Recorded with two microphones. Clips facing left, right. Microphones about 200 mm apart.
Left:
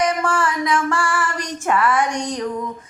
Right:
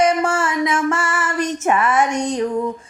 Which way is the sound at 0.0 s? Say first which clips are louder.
Right 3 dB; 25° right (ahead or behind).